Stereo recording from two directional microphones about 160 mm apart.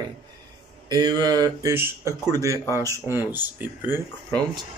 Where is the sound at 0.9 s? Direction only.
25° right (ahead or behind).